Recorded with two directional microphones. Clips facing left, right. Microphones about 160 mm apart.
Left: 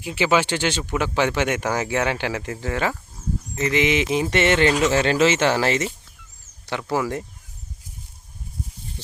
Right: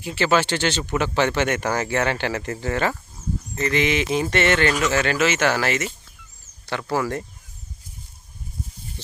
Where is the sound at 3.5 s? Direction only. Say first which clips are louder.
Left 1 dB; 15° left (ahead or behind).